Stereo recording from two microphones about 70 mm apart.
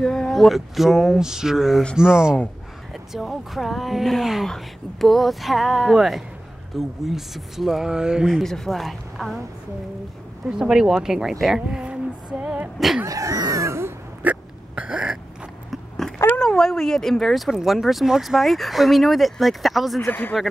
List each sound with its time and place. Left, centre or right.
0.0 s speech: centre
8.4 s speech: centre
10.6 s a woman's voice: centre
12.7 s speech: centre
13.0 s a sound: right
14.2 s hiccup: right
16.0 s a sound: centre
16.3 s speech: centre
20.1 s speech: left